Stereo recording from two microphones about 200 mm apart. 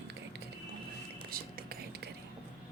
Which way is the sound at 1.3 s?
50° right (ahead or behind).